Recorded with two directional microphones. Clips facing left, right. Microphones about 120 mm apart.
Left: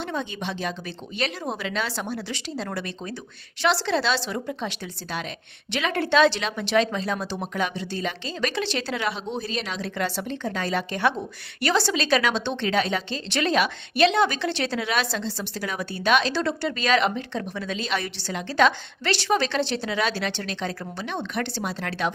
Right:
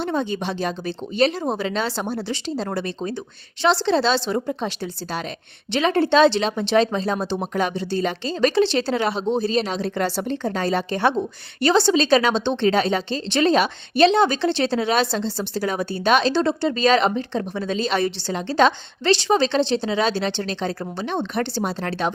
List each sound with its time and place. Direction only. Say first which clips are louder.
0.0 s a woman's voice: right 6 dB; 35° right (ahead or behind)